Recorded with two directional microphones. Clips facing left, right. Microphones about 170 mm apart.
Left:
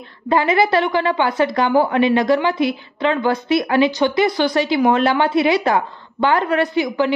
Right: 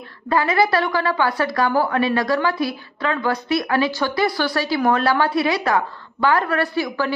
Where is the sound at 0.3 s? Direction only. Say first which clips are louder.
Left 2 dB; 25° left (ahead or behind).